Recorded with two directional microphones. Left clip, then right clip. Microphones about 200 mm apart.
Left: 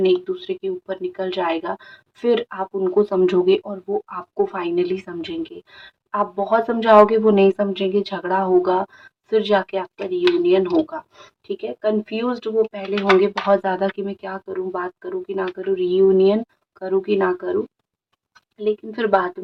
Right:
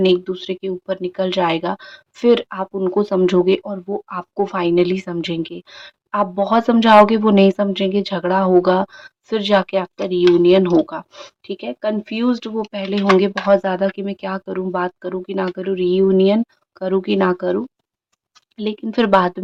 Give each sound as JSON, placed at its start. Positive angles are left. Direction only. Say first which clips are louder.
{"t": 0.0, "sound": "speech", "louder": "right 2 dB", "side_deg": -45}
{"t": 13.5, "sound": "speech", "louder": "right 6 dB", "side_deg": -35}